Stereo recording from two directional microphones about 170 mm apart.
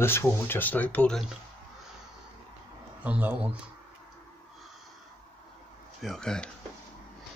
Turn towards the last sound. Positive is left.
turn(degrees=5)  # may be behind; listen again after turning